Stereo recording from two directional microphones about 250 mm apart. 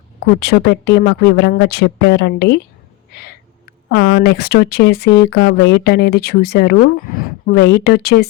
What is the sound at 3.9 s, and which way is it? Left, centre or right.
Speech, left.